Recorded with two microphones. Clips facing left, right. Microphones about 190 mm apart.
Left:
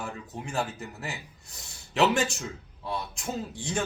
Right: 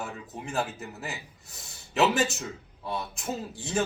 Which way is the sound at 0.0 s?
5° right (ahead or behind).